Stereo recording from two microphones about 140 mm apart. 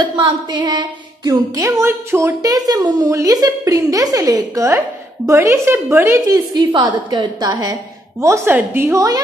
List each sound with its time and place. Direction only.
0.0 s speech: 35° right (ahead or behind)
8.2 s speech: 20° right (ahead or behind)